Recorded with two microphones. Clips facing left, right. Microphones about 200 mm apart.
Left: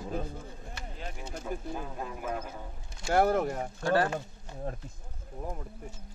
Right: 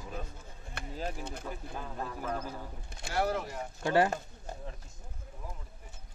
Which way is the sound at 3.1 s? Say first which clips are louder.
Left 6 dB; 50° left (ahead or behind).